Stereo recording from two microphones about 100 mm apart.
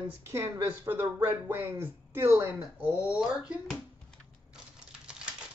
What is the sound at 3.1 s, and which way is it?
Speech, 5° right (ahead or behind).